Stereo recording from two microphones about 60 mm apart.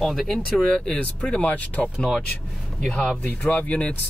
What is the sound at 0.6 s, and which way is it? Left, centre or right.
Speech, centre.